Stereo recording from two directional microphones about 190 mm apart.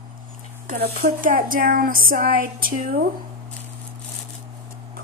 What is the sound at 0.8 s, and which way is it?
Speech, 45° right (ahead or behind).